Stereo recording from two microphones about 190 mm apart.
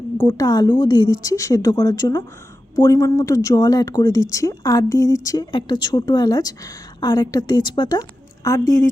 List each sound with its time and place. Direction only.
0.2 s speech: 20° left (ahead or behind)